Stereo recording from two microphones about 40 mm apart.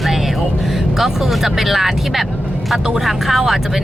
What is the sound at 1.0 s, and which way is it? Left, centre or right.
Speech, centre.